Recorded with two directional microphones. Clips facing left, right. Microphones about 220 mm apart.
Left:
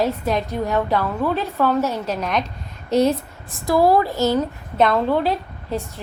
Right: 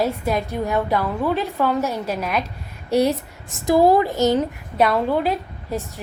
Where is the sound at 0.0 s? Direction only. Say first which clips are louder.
Left 1 dB; 10° right (ahead or behind).